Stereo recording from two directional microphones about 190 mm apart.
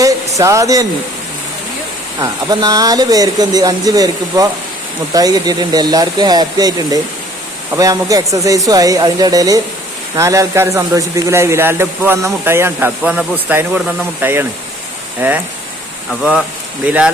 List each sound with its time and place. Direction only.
0.0 s a sound: 15° right (ahead or behind)
2.2 s a man's voice: 20° right (ahead or behind)
16.8 s a man's voice: 5° right (ahead or behind)